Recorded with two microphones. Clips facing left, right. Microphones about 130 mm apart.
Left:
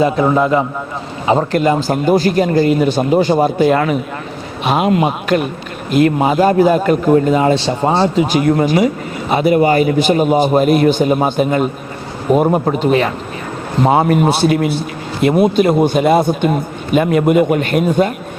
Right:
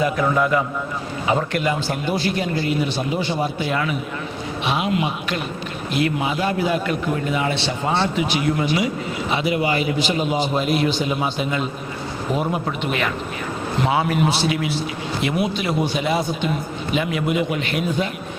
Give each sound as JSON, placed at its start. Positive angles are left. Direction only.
{"t": 0.0, "sound": "a man's voice", "side_deg": 30}
{"t": 8.4, "sound": "a man's voice", "side_deg": 45}
{"t": 13.8, "sound": "a man's voice", "side_deg": 45}